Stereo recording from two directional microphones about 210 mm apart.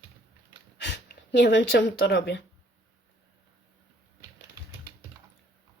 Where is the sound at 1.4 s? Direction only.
60° left (ahead or behind).